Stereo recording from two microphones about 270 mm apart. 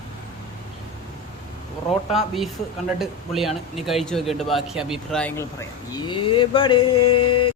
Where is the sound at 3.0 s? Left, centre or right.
Centre.